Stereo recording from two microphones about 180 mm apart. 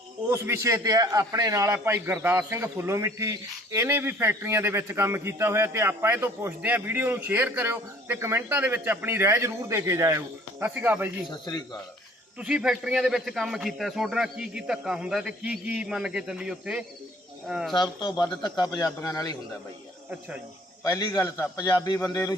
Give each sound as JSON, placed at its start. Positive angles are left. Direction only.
{"t": 0.3, "sound": "a man's voice", "side_deg": -15}
{"t": 11.3, "sound": "a man's voice", "side_deg": 25}
{"t": 12.4, "sound": "a man's voice", "side_deg": -5}
{"t": 18.0, "sound": "a man's voice", "side_deg": 20}
{"t": 20.8, "sound": "a man's voice", "side_deg": 20}